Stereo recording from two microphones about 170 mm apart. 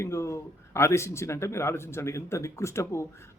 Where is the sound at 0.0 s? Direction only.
15° left (ahead or behind).